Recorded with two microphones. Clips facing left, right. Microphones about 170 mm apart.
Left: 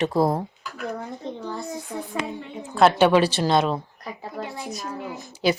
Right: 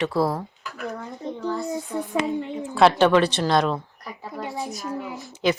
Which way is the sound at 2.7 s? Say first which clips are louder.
Even; centre (ahead or behind).